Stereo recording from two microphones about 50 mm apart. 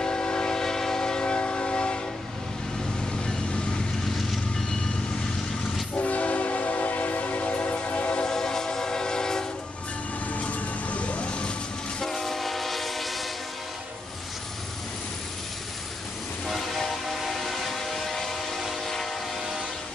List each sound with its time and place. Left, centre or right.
0.0 s train: centre
5.9 s train: left
8.2 s train: centre
10.3 s vehicle: left
12.0 s train: centre
16.4 s train: centre